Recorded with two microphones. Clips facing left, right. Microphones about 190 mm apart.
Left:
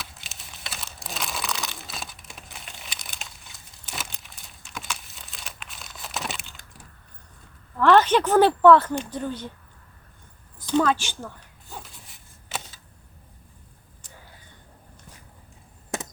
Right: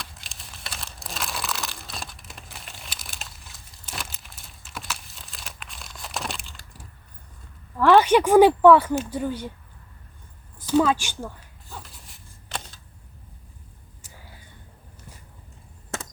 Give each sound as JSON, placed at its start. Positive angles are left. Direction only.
{"t": 0.0, "sound": "crumpling", "side_deg": 0}
{"t": 7.8, "sound": "a woman's voice", "side_deg": -10}
{"t": 10.7, "sound": "a woman's voice", "side_deg": -10}
{"t": 11.7, "sound": "a sound", "side_deg": 0}